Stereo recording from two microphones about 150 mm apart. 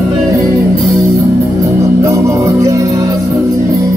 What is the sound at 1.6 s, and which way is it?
Music, 20° right (ahead or behind).